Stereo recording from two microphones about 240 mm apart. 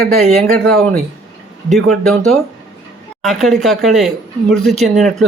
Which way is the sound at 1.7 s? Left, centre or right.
Centre.